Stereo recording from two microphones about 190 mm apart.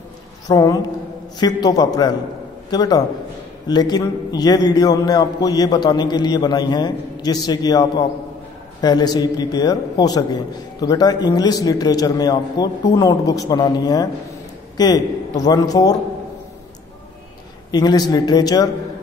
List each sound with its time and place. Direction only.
0.5 s a man's voice: 20° left (ahead or behind)
17.6 s a man's voice: 20° left (ahead or behind)